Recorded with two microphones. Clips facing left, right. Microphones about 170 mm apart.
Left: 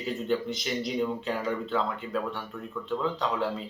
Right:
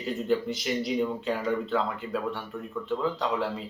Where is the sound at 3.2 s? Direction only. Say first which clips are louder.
Right 1 dB; centre (ahead or behind).